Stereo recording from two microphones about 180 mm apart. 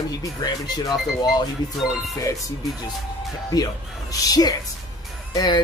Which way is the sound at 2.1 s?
20° left (ahead or behind).